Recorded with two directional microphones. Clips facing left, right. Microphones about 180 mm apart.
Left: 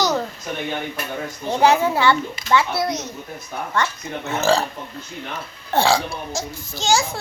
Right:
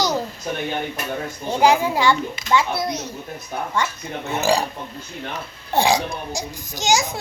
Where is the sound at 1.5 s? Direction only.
15° right (ahead or behind).